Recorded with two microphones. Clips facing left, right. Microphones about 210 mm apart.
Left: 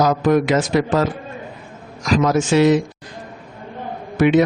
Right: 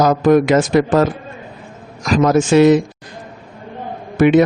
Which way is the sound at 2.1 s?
50° right (ahead or behind).